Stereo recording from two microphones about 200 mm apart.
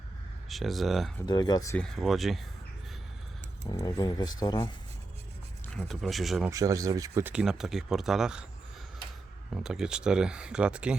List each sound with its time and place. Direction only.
0.4 s speech: centre (ahead or behind)
1.2 s speech: 20° left (ahead or behind)
1.8 s speech: centre (ahead or behind)
3.7 s speech: 15° left (ahead or behind)
5.6 s speech: 5° left (ahead or behind)
6.5 s speech: 15° right (ahead or behind)
9.5 s speech: centre (ahead or behind)